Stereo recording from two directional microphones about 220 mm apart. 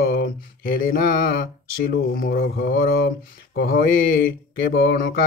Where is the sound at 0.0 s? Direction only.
45° left (ahead or behind).